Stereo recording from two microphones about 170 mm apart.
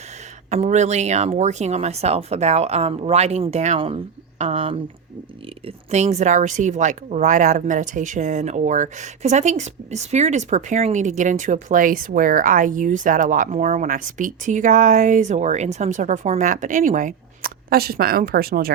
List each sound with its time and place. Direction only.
0.5 s speech: 40° right (ahead or behind); by 18.7 s 60° right (ahead or behind)